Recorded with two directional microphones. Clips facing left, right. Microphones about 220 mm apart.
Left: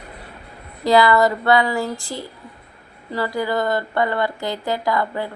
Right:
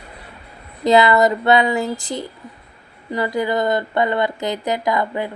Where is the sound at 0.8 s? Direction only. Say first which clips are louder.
Right 1 dB; 20° right (ahead or behind).